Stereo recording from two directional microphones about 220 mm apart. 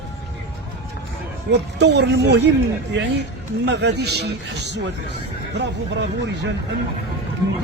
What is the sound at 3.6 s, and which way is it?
Speech, 50° right (ahead or behind).